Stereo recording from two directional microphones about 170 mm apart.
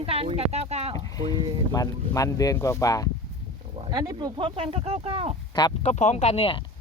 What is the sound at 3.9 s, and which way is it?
Speech, 25° right (ahead or behind).